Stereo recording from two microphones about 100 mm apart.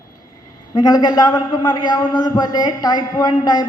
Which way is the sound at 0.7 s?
40° left (ahead or behind).